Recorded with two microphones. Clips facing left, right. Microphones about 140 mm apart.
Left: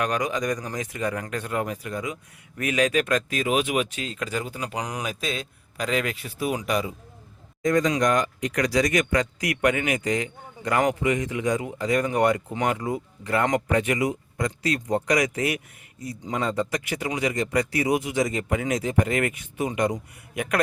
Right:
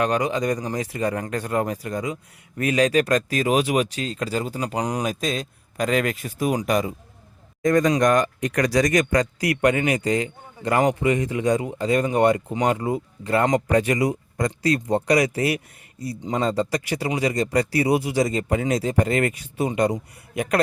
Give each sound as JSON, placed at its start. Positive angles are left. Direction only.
{"t": 0.0, "sound": "speech", "side_deg": -30}